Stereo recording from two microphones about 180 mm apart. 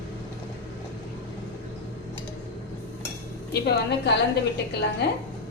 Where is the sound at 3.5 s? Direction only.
65° left (ahead or behind).